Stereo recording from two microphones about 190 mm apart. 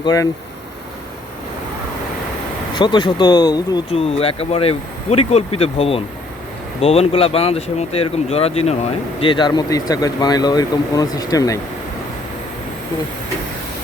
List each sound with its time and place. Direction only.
0.0 s speech: 20° left (ahead or behind)
2.7 s speech: 25° left (ahead or behind)